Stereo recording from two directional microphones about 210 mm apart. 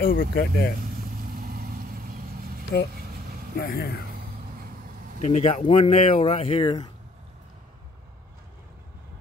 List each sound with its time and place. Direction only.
0.0 s speech: 45° left (ahead or behind)
0.9 s vehicle: 45° right (ahead or behind)
3.5 s speech: 45° left (ahead or behind)
5.2 s speech: 30° left (ahead or behind)